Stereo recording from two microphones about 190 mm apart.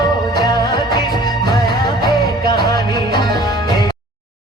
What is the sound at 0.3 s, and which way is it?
Music of bollywood, 20° left (ahead or behind).